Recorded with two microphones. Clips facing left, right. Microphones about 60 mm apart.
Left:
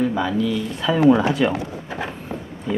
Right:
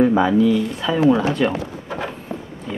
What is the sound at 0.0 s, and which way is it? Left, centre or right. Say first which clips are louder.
Speech: right 6 dB; right.